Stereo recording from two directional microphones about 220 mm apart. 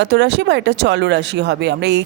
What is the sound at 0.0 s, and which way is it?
Speech, 50° right (ahead or behind).